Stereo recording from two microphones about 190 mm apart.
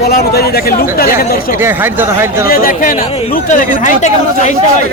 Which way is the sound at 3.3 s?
45° left (ahead or behind).